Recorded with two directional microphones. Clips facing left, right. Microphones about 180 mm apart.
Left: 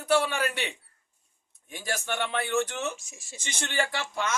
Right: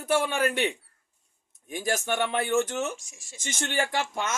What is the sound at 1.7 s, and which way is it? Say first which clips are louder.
Speech: right 5 dB; 45° right (ahead or behind).